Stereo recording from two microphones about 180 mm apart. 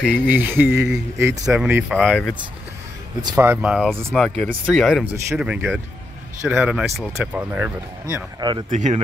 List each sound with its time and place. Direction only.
0.0 s speech: 5° right (ahead or behind)
3.3 s speech: 5° right (ahead or behind)
8.6 s speech: 45° right (ahead or behind)